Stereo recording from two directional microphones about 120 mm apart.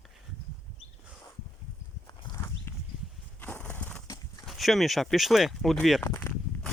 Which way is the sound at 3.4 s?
15° left (ahead or behind).